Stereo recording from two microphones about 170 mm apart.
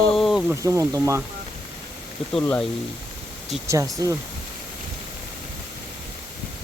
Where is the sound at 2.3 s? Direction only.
5° left (ahead or behind).